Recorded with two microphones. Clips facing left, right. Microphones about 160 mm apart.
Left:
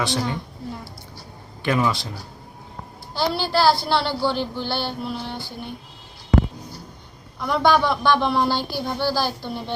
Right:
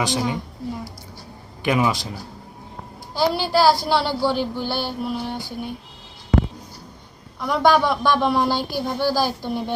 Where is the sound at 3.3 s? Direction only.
10° right (ahead or behind).